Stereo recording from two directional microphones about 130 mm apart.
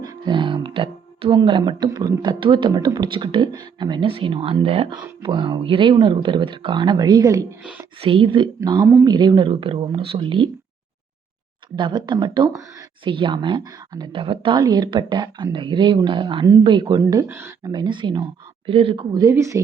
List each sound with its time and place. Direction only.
0.0 s speech: 30° right (ahead or behind); by 4.9 s 50° right (ahead or behind)
5.2 s speech: 35° right (ahead or behind)
7.6 s speech: 10° right (ahead or behind)
8.0 s speech: 45° right (ahead or behind)
11.8 s speech: 35° right (ahead or behind)
17.2 s speech: 15° right (ahead or behind)
17.7 s speech: 35° right (ahead or behind)